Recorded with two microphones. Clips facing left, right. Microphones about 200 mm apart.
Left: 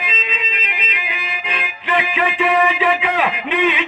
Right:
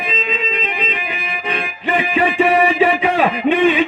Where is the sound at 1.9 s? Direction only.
45° right (ahead or behind).